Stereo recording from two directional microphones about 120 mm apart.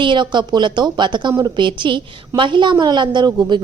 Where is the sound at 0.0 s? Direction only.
40° right (ahead or behind).